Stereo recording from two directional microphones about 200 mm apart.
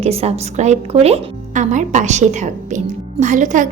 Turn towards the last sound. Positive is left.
turn(degrees=-40)  # may be behind; listen again after turning